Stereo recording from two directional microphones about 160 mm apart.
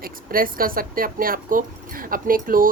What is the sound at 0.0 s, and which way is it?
Speech, 65° right (ahead or behind).